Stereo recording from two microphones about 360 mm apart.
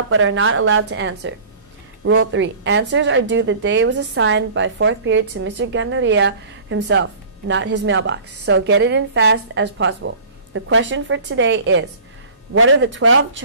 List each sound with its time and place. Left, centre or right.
0.1 s speech: right